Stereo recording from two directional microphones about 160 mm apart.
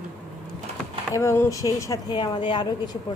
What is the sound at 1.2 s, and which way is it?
Speech, 15° left (ahead or behind).